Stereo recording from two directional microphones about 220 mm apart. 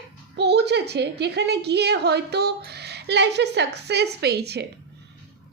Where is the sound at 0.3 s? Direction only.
50° right (ahead or behind).